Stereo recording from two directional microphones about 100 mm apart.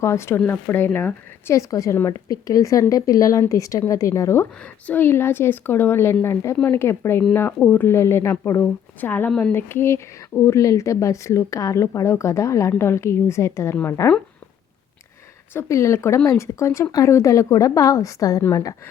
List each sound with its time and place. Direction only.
0.0 s speech: 30° left (ahead or behind)
15.5 s speech: 30° left (ahead or behind)